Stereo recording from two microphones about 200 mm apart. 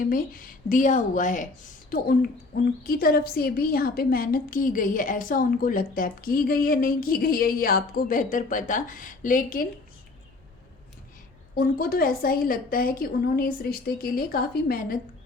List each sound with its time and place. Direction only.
0.0 s a woman's voice: 45° left (ahead or behind)
11.5 s a woman's voice: 50° left (ahead or behind)